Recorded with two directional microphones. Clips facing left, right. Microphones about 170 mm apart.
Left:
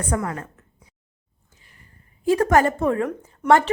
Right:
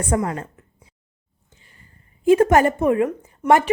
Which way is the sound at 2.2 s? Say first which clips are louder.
Right 3 dB; 20° right (ahead or behind).